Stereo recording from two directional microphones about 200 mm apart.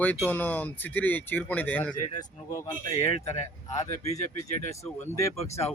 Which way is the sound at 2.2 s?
20° left (ahead or behind).